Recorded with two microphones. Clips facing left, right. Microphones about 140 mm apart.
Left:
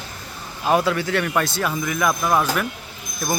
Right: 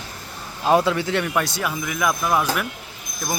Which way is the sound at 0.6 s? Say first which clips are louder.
Right 1 dB; 25° right (ahead or behind).